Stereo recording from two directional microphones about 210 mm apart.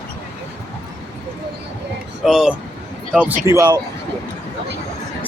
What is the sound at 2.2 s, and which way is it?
Speech, centre (ahead or behind).